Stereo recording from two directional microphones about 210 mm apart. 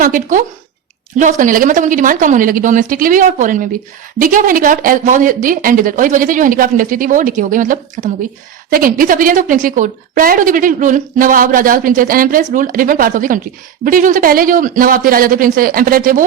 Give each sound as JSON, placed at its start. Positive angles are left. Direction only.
{"t": 0.0, "sound": "a woman's voice", "side_deg": -40}